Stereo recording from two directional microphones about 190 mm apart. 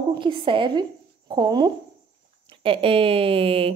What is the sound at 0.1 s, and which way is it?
A woman's voice, 25° right (ahead or behind).